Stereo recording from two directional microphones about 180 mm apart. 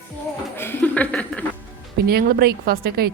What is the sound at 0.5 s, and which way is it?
Chuckle, 10° left (ahead or behind).